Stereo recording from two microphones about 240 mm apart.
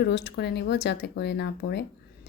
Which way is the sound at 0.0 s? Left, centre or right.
Left.